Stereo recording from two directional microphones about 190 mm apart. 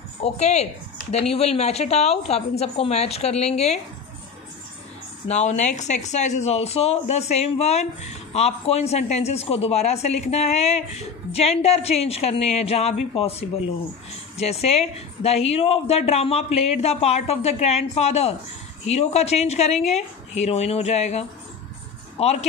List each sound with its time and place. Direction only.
0.2 s speech: 35° left (ahead or behind)
5.3 s speech: 35° left (ahead or behind)